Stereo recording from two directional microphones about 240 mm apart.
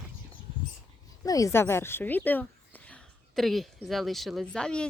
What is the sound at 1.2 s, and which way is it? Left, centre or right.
Speech, centre.